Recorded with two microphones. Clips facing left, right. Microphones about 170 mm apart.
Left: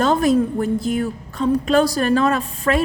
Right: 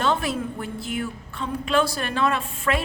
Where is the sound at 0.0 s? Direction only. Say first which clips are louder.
Left 8 dB; 40° left (ahead or behind).